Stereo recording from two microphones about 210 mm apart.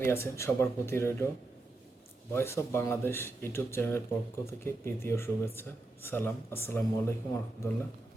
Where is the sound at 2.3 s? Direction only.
10° left (ahead or behind).